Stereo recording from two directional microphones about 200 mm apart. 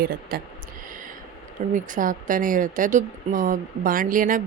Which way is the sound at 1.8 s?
40° right (ahead or behind).